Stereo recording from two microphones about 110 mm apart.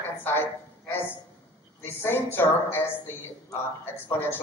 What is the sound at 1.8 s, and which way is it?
Speech, 20° left (ahead or behind).